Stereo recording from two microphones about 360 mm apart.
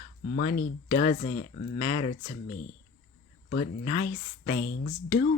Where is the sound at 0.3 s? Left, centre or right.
Left.